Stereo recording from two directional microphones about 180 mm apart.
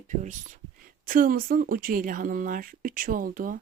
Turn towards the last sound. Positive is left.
turn(degrees=-50)  # may be behind; listen again after turning